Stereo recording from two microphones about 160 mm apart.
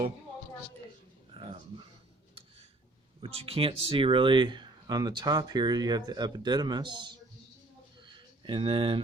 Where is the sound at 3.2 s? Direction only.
35° right (ahead or behind).